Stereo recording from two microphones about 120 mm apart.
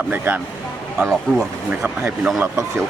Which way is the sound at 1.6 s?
10° right (ahead or behind).